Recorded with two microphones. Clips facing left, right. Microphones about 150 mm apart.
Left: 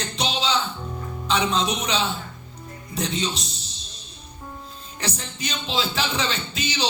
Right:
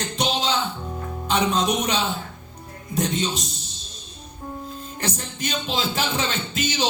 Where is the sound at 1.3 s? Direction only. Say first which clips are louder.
Right 2 dB; 50° right (ahead or behind).